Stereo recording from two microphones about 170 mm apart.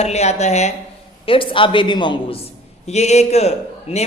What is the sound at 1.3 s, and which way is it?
Speech, 30° left (ahead or behind).